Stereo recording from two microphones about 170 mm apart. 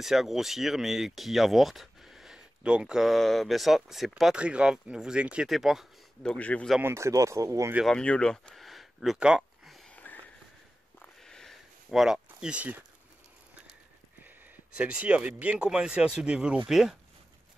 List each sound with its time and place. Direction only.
0.0 s speech: centre (ahead or behind)
6.8 s speech: 15° right (ahead or behind)
7.7 s a sound: centre (ahead or behind)
14.8 s speech: 5° right (ahead or behind)